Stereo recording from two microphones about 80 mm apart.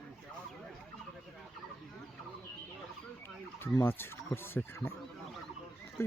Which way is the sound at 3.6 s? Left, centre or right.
Left.